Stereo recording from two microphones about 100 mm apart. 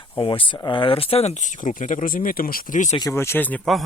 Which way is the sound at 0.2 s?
60° left (ahead or behind).